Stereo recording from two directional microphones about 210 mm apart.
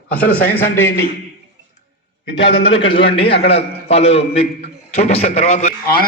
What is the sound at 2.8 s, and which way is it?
A man's voice, 25° left (ahead or behind).